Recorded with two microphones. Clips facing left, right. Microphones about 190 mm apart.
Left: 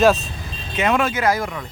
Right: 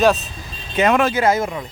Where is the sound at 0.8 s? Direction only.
45° right (ahead or behind).